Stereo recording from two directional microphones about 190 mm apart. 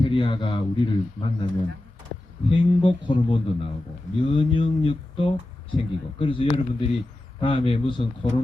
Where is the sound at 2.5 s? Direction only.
25° left (ahead or behind).